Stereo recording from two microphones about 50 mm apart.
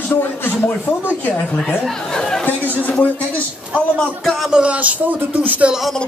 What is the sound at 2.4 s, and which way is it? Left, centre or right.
Chatter, left.